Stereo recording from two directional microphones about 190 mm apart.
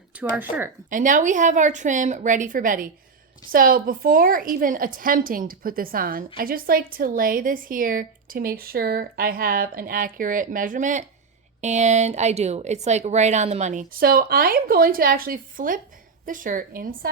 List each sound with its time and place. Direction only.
0.1 s speech: 5° right (ahead or behind)
0.9 s a woman's voice: 45° right (ahead or behind)